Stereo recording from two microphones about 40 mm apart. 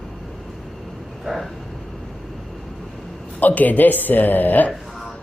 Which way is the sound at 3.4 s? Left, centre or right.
Left.